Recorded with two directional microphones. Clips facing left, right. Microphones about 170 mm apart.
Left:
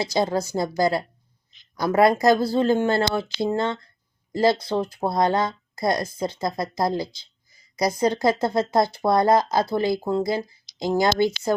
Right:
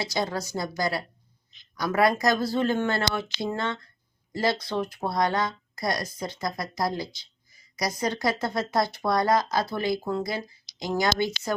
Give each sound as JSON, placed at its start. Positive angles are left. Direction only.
{"t": 0.3, "sound": "speech", "side_deg": 25}
{"t": 8.1, "sound": "speech", "side_deg": 25}